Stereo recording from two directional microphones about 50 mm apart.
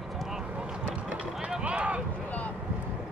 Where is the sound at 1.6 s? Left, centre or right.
Right.